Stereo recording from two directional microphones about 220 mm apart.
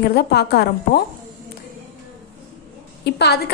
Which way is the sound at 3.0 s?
50° left (ahead or behind).